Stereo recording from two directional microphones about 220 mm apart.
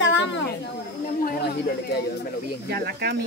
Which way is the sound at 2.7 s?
45° right (ahead or behind).